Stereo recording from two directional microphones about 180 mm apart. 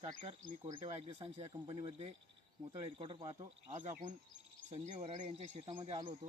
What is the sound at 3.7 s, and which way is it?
Speech, 40° right (ahead or behind).